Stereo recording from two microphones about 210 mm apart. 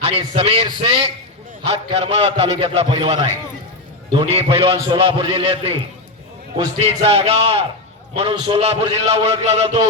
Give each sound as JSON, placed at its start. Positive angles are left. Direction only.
{"t": 0.0, "sound": "a man's voice", "side_deg": -30}
{"t": 6.7, "sound": "a man's voice", "side_deg": -30}